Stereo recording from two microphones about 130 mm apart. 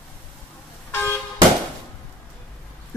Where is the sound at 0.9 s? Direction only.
15° left (ahead or behind).